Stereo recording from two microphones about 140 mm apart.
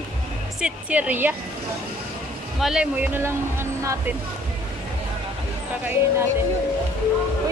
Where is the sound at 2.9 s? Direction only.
15° right (ahead or behind).